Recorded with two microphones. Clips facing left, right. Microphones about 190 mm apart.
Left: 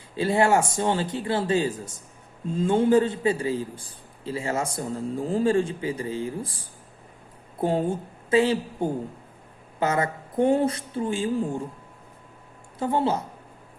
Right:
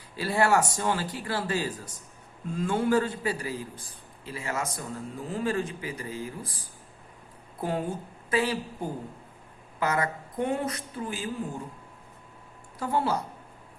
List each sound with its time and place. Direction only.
0.2 s speech: 25° left (ahead or behind)
7.6 s speech: 25° left (ahead or behind)
12.8 s speech: 25° left (ahead or behind)